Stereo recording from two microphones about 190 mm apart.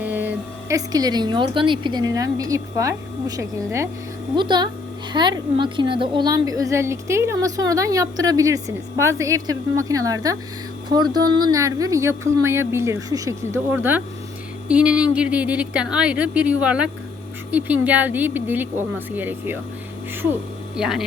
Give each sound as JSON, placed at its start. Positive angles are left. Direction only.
{"t": 0.0, "sound": "a woman's voice", "side_deg": -10}